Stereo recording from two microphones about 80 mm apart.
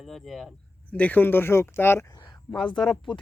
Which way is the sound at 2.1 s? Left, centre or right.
Left.